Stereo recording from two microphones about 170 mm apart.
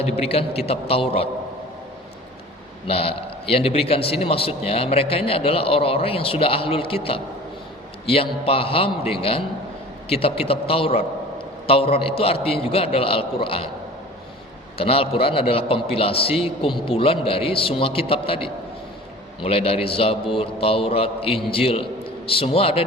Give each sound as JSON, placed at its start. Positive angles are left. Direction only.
{"t": 0.0, "sound": "a man's voice", "side_deg": 35}
{"t": 2.8, "sound": "a man's voice", "side_deg": 35}
{"t": 14.8, "sound": "a man's voice", "side_deg": 35}